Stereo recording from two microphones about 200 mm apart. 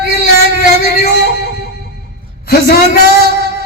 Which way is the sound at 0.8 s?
50° left (ahead or behind).